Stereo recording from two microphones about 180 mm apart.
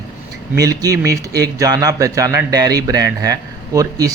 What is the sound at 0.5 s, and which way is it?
Speech, 20° right (ahead or behind).